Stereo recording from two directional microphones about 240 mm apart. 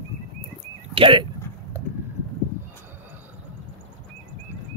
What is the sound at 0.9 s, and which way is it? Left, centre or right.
Speech, right.